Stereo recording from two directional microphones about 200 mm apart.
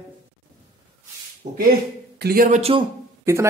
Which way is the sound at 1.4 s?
35° right (ahead or behind).